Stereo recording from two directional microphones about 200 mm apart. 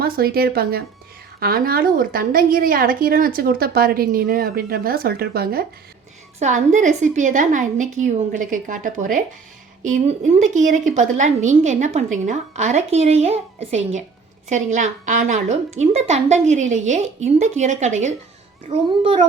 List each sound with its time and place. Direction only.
0.0 s a woman's voice: 50° right (ahead or behind)
6.4 s a woman's voice: 35° right (ahead or behind)